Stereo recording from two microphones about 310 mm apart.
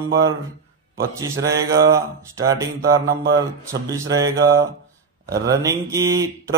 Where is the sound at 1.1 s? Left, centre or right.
Centre.